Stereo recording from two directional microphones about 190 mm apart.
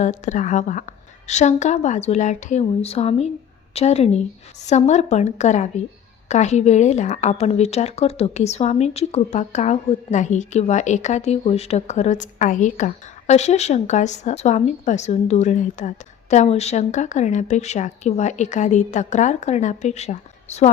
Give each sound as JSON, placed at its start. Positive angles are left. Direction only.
{"t": 0.0, "sound": "a woman's voice", "side_deg": 40}